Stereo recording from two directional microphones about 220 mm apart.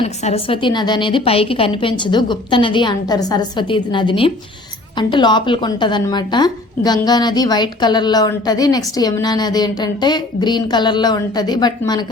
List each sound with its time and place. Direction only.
0.0 s a woman's voice: 30° left (ahead or behind)